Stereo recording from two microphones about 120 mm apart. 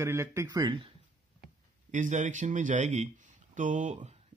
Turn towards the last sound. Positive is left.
turn(degrees=-90)